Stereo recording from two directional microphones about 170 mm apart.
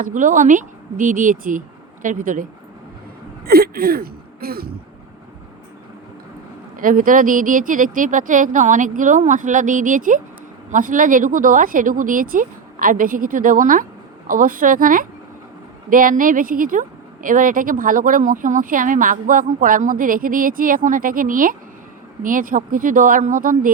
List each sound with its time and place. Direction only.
0.0 s speech: 50° right (ahead or behind)
3.4 s speech: 65° right (ahead or behind)
6.7 s speech: 55° right (ahead or behind)